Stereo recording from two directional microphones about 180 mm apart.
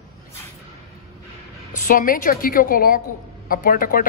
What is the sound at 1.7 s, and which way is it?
A man's voice, 50° left (ahead or behind).